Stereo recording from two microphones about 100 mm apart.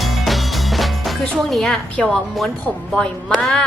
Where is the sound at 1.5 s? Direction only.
5° left (ahead or behind).